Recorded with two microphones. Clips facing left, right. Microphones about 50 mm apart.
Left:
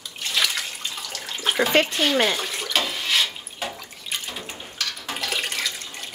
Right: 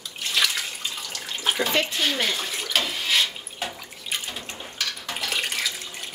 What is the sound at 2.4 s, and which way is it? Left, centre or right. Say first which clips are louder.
Drip: left 1 dB; centre.